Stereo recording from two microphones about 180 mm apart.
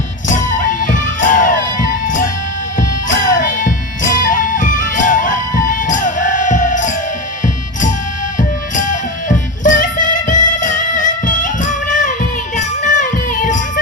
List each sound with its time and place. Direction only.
0.3 s music: 45° left (ahead or behind)